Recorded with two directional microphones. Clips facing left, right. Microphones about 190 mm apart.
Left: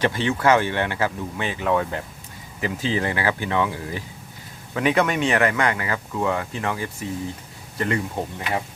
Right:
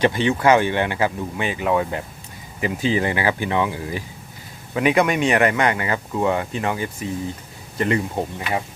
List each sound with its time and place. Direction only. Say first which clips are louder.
0.0 s speech: right 3 dB; 15° right (ahead or behind)